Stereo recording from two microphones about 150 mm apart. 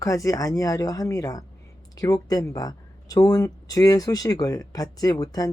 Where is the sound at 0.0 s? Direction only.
20° left (ahead or behind).